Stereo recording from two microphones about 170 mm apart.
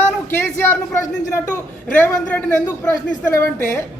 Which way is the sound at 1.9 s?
10° left (ahead or behind).